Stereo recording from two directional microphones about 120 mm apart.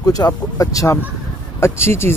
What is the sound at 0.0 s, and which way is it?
Speech, 30° left (ahead or behind).